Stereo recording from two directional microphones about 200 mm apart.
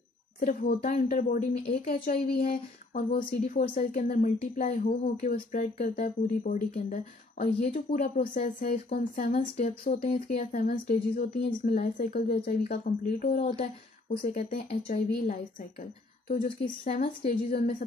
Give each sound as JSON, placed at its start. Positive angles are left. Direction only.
{"t": 0.5, "sound": "speech", "side_deg": 40}
{"t": 13.4, "sound": "speech", "side_deg": 30}
{"t": 16.8, "sound": "speech", "side_deg": 45}